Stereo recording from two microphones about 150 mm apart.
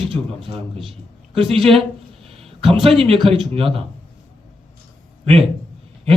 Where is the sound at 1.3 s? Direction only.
35° right (ahead or behind).